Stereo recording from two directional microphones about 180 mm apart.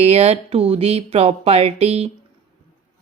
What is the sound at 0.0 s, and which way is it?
Speech, 35° right (ahead or behind).